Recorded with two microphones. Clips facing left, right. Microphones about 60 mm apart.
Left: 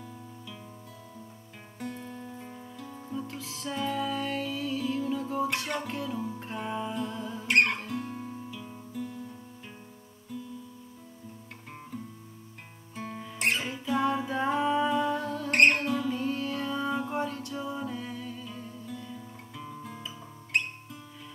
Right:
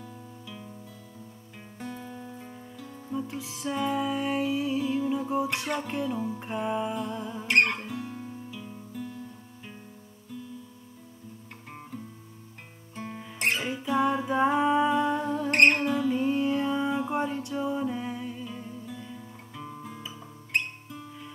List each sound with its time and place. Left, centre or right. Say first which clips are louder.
1.8 s music: even; centre
7.4 s guitar: right 1 dB; centre
12.9 s music: even; centre
15.5 s music: right 1 dB; centre
16.2 s music: right 6 dB; centre